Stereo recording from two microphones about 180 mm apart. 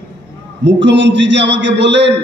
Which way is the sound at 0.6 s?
80° right.